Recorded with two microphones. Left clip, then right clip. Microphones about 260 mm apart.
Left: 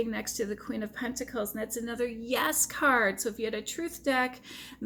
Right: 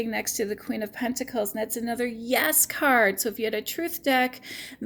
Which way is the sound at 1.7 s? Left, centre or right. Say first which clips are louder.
Right 4 dB; right.